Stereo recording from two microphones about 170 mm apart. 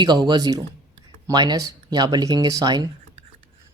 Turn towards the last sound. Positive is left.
turn(degrees=-25)  # may be behind; listen again after turning